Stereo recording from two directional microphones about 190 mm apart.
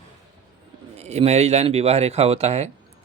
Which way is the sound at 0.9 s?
35° right (ahead or behind).